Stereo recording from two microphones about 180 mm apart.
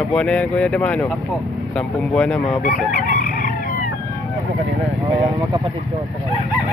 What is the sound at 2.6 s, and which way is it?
Chicken, 50° left (ahead or behind).